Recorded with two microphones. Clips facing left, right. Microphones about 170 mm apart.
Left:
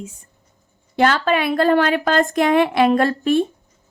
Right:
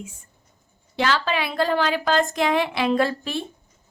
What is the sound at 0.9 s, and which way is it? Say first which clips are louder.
A woman's voice: left 6 dB; 50° left (ahead or behind).